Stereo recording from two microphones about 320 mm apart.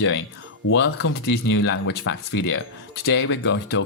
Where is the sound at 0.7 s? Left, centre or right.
Left.